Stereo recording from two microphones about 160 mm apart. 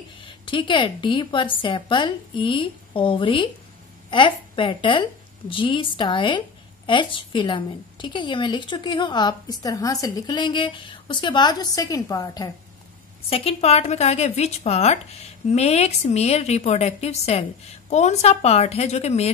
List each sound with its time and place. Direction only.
0.2 s a woman's voice: 30° left (ahead or behind)
13.3 s a woman's voice: 35° left (ahead or behind)